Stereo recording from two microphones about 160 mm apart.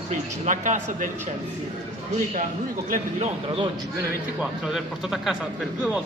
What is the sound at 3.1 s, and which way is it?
Speech, 35° right (ahead or behind).